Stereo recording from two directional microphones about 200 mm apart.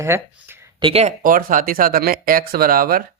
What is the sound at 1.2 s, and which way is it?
Speech, 45° right (ahead or behind).